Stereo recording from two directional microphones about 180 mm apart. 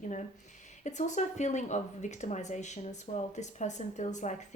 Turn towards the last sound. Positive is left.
turn(degrees=40)  # may be behind; listen again after turning